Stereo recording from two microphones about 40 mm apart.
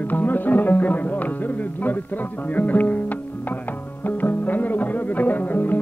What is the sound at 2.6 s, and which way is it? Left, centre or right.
Speech, left.